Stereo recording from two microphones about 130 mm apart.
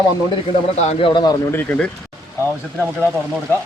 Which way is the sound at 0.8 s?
50° left (ahead or behind).